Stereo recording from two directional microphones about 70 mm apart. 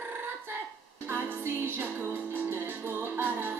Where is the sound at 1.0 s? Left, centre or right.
Right.